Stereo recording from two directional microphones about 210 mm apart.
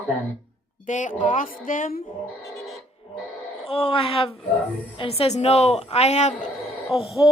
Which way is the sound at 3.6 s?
25° left (ahead or behind).